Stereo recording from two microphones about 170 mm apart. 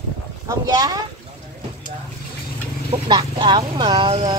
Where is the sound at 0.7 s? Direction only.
25° right (ahead or behind).